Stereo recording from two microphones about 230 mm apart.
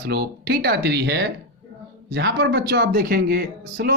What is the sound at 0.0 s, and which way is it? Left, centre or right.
Speech, right.